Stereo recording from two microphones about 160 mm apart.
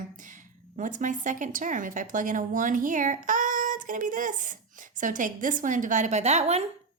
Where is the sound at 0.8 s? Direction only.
50° right (ahead or behind).